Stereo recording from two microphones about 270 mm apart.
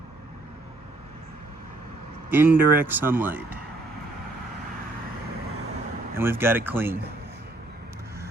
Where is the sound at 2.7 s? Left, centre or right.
Centre.